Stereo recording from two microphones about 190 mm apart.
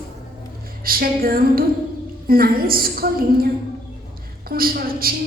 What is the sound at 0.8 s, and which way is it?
A woman's voice, 50° right (ahead or behind).